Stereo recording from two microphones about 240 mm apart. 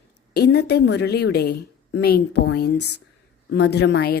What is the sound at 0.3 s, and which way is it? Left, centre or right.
Speech, left.